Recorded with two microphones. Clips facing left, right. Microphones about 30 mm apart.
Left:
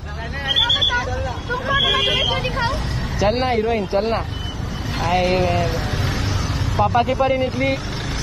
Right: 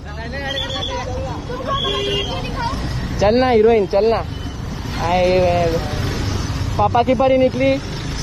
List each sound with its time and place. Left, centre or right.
0.6 s vehicle: left
2.1 s vehicle: left
3.2 s speech: centre